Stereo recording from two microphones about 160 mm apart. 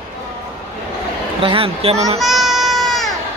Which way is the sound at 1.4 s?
35° right (ahead or behind).